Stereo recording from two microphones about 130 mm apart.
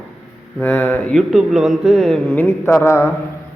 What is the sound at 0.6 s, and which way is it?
Speech, 15° left (ahead or behind).